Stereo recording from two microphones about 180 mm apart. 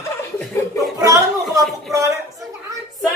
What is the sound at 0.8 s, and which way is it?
Speech, 20° right (ahead or behind).